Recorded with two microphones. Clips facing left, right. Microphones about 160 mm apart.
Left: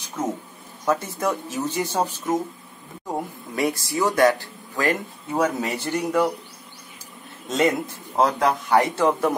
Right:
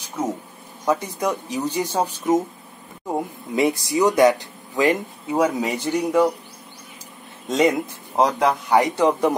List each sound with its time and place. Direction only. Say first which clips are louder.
0.8 s speech: right 1 dB; 15° right (ahead or behind)
3.5 s speech: right 4 dB; 20° right (ahead or behind)
7.4 s speech: right 2 dB; 15° right (ahead or behind)